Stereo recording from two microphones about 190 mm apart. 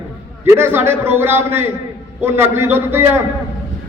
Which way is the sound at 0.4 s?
15° right (ahead or behind).